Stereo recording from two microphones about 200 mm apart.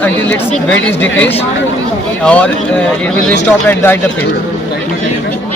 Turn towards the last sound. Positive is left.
turn(degrees=10)  # may be behind; listen again after turning